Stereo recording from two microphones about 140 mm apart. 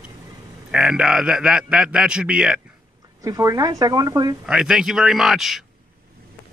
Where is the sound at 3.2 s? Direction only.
25° right (ahead or behind).